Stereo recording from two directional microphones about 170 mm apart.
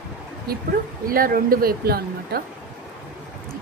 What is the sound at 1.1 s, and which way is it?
Speech, 60° right (ahead or behind).